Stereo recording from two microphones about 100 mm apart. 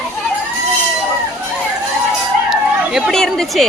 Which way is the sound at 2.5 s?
5° right (ahead or behind).